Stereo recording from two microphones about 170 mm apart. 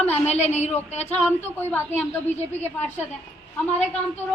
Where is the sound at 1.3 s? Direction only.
10° left (ahead or behind).